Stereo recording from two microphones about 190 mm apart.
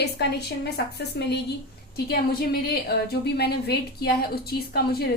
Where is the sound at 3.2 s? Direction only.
60° left (ahead or behind).